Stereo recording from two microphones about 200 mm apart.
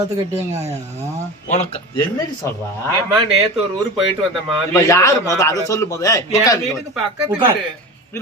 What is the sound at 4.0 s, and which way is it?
Speech, 25° right (ahead or behind).